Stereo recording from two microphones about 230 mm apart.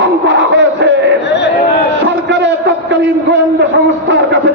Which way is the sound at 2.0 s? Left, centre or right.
Right.